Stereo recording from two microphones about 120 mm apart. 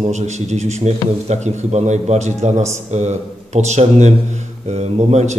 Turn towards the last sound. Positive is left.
turn(degrees=-65)  # may be behind; listen again after turning